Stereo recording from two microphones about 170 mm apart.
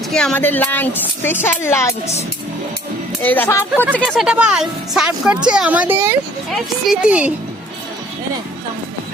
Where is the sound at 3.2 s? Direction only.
10° left (ahead or behind); by 7.3 s 5° right (ahead or behind).